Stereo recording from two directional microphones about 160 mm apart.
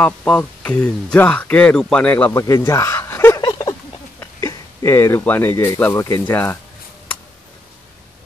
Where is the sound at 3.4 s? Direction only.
25° left (ahead or behind).